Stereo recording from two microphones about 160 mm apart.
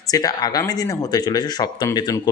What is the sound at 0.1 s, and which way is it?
Speech, 25° left (ahead or behind).